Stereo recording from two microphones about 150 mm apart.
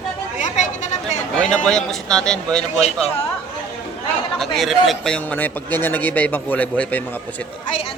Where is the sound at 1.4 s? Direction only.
5° left (ahead or behind).